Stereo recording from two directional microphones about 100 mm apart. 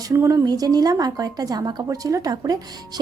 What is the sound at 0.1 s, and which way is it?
Speech, 30° right (ahead or behind).